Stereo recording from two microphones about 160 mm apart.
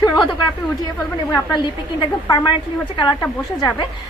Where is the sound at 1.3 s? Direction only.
25° left (ahead or behind).